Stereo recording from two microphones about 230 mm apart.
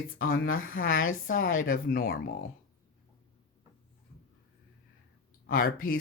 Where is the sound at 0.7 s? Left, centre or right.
Left.